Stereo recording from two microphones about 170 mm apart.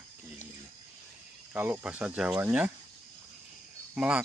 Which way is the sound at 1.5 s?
10° right (ahead or behind).